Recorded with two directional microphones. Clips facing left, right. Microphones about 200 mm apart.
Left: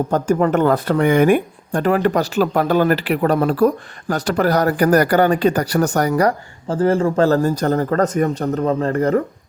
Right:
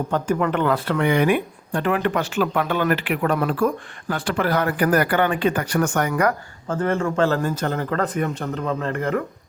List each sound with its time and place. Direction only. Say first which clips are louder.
0.1 s speech: left 4 dB; 40° left (ahead or behind)